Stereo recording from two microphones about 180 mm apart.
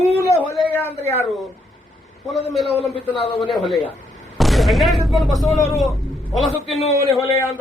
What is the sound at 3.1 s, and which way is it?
Speech, 30° left (ahead or behind).